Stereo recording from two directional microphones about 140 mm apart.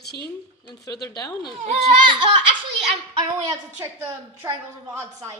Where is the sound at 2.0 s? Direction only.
40° right (ahead or behind).